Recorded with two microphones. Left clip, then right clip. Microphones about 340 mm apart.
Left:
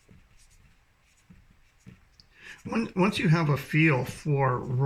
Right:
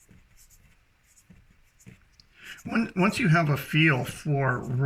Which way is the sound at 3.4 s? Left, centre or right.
Left.